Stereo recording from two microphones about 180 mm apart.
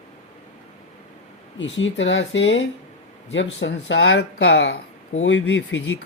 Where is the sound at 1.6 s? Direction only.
90° left.